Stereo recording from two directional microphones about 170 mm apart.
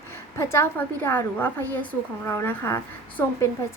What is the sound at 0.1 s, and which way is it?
A woman's voice, 15° left (ahead or behind).